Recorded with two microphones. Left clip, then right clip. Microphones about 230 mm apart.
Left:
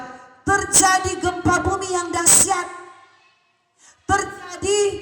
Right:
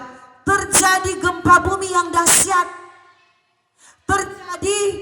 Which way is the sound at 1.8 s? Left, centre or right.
Centre.